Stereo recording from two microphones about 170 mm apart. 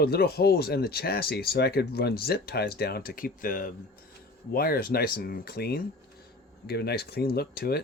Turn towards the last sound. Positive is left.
turn(degrees=65)  # may be behind; listen again after turning